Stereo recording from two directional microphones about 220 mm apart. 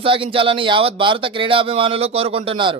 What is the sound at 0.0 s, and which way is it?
Speech, 25° right (ahead or behind).